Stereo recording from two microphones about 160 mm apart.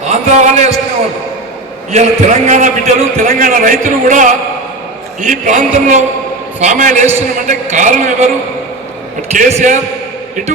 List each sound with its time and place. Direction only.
0.1 s a man's voice: 45° right (ahead or behind)
1.9 s a man's voice: 45° right (ahead or behind)
9.3 s a man's voice: 45° right (ahead or behind)